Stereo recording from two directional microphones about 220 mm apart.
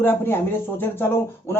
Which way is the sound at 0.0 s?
10° left (ahead or behind).